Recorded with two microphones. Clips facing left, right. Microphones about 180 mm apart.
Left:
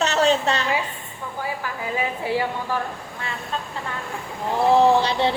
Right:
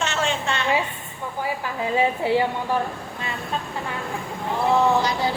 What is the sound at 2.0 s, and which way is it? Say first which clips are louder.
Speech: right 4 dB; 25° right (ahead or behind).